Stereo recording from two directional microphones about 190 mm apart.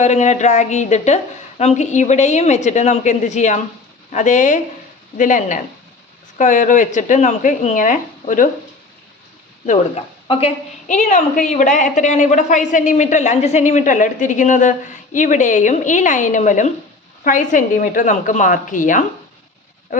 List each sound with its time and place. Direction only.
0.0 s a woman's voice: 40° left (ahead or behind)
9.6 s a woman's voice: 30° left (ahead or behind)